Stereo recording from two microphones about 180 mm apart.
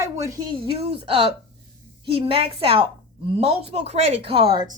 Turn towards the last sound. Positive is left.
turn(degrees=-30)  # may be behind; listen again after turning